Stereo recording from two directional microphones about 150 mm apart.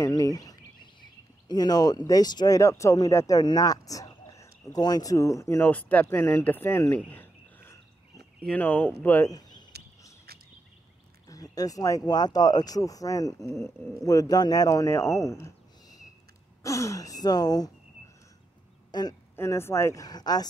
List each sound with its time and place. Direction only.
0.0 s speech: 25° left (ahead or behind)
9.3 s a sound: 25° left (ahead or behind)
11.2 s speech: 25° left (ahead or behind)
19.3 s speech: 15° left (ahead or behind)